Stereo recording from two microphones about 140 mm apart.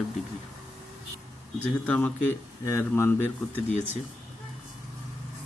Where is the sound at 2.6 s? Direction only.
20° left (ahead or behind).